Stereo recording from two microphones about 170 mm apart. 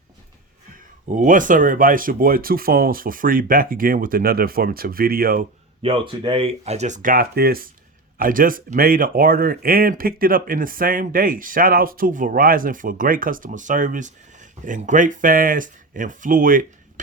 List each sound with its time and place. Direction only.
1.0 s speech: 50° right (ahead or behind)
5.8 s speech: 30° right (ahead or behind); by 16.6 s 55° right (ahead or behind)